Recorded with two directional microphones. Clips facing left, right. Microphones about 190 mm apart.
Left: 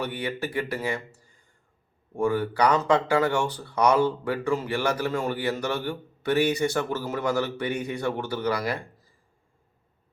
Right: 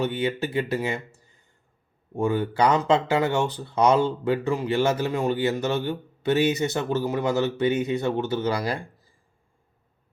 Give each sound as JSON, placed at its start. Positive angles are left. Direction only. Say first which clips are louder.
{"t": 0.0, "sound": "speech", "louder": "right 5 dB", "side_deg": -25}
{"t": 2.1, "sound": "speech", "louder": "right 1 dB", "side_deg": -20}